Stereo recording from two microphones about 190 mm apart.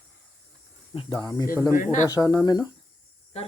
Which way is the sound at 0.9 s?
20° left (ahead or behind).